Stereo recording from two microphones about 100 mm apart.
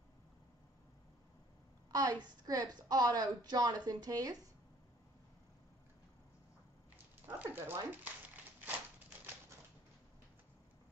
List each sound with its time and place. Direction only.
1.9 s a woman's voice: 40° right (ahead or behind)
7.2 s speech: 20° right (ahead or behind)